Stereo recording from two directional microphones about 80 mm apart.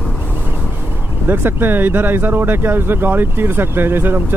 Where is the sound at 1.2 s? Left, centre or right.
Right.